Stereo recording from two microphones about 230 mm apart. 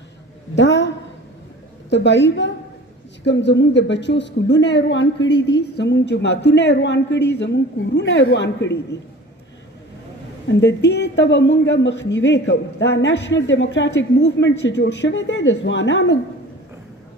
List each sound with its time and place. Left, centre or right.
0.6 s a sound: left
1.9 s a woman's voice: left
10.6 s a woman's voice: left